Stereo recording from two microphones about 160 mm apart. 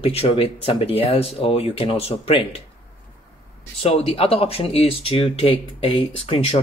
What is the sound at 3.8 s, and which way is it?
Speech, 35° left (ahead or behind).